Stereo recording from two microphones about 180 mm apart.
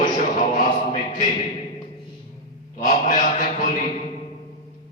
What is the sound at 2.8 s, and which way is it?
Speech, 45° left (ahead or behind).